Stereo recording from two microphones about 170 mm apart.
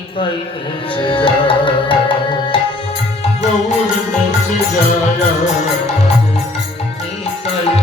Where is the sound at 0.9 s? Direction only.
30° left (ahead or behind).